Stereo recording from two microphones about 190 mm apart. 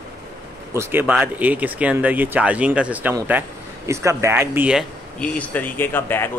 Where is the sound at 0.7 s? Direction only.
10° right (ahead or behind).